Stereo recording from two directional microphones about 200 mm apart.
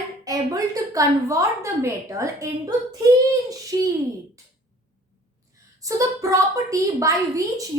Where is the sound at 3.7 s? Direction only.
20° right (ahead or behind).